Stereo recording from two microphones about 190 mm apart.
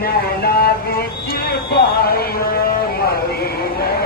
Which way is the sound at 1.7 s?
55° left (ahead or behind).